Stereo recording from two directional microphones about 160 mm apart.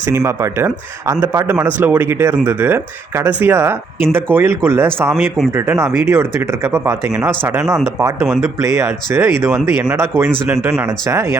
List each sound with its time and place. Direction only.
0.1 s a man's voice: 15° right (ahead or behind)